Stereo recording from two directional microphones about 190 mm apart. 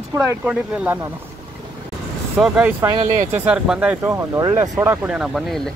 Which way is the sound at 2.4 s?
5° right (ahead or behind).